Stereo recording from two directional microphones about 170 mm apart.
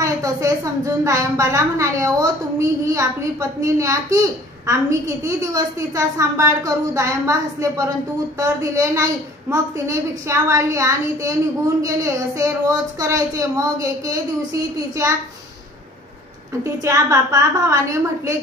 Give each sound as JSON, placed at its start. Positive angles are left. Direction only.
{"t": 0.0, "sound": "a woman's voice", "side_deg": -20}
{"t": 16.6, "sound": "a woman's voice", "side_deg": -15}